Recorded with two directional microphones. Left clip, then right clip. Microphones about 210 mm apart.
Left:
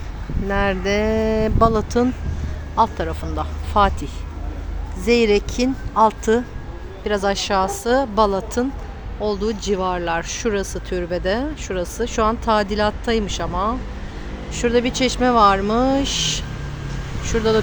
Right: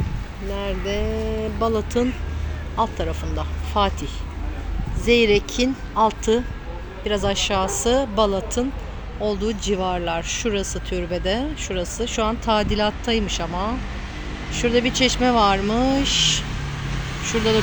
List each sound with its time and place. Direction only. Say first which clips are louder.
0.5 s speech: left 7 dB; 20° left (ahead or behind)
2.7 s speech: left 5 dB; 5° left (ahead or behind)